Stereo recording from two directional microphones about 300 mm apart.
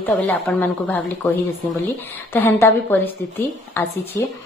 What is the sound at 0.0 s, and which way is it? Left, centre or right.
A woman's voice, centre.